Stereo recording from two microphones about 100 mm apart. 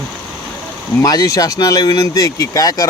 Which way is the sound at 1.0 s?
35° left (ahead or behind).